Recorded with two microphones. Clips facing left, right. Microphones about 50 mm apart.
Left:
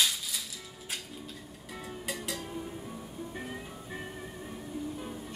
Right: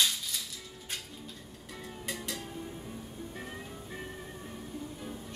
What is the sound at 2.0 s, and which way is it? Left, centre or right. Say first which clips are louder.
Music: left 1 dB; centre.